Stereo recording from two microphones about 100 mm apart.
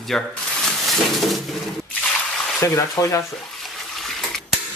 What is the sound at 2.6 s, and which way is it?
Speech, 30° left (ahead or behind).